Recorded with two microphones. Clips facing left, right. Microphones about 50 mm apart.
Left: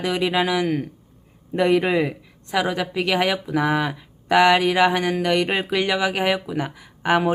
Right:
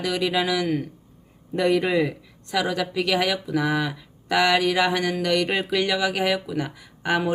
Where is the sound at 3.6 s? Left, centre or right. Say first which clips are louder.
Left 3 dB; left.